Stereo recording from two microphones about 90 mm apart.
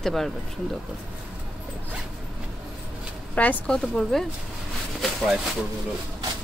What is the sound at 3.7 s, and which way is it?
Speech, 5° left (ahead or behind).